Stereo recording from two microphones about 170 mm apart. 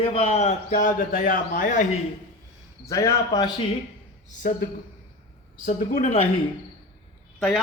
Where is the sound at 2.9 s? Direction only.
20° left (ahead or behind).